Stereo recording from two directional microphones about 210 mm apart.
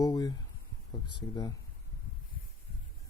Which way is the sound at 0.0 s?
15° left (ahead or behind).